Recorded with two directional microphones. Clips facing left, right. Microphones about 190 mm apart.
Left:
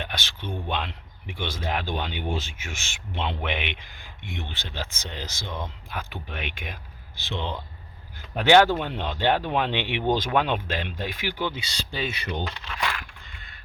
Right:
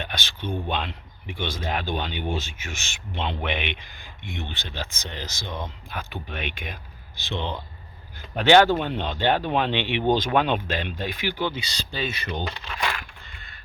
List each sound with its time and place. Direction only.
0.0 s speech: 5° left (ahead or behind)